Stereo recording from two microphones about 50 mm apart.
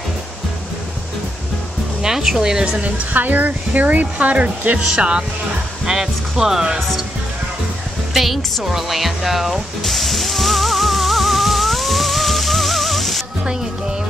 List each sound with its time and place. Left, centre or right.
2.0 s speech: centre
2.8 s speech: right
4.7 s speech: centre
8.1 s a woman's voice: centre
8.6 s music: centre